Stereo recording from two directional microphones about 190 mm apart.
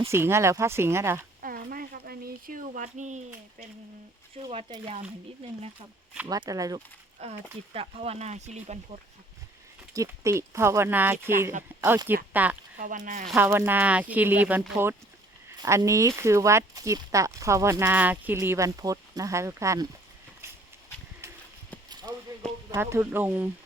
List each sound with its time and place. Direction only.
0.1 s speech: 15° right (ahead or behind)
1.4 s a sound: 50° right (ahead or behind)
4.4 s speech: 25° right (ahead or behind)
6.2 s speech: 20° right (ahead or behind)
7.2 s speech: 35° right (ahead or behind)
9.9 s speech: 15° right (ahead or behind)
12.8 s speech: 45° right (ahead or behind)
13.3 s speech: 15° right (ahead or behind)
22.7 s speech: 15° right (ahead or behind)